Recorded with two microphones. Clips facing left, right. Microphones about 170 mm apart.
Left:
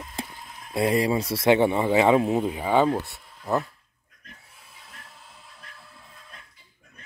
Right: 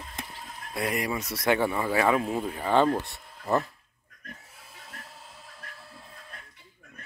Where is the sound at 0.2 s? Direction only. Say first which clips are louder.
Left 6 dB; 30° left (ahead or behind).